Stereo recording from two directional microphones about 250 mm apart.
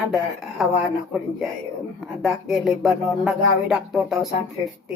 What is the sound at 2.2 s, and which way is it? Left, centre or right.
Music, centre.